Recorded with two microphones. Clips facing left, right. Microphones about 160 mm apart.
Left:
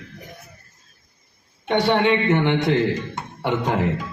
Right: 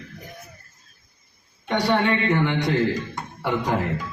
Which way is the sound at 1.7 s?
25° left (ahead or behind).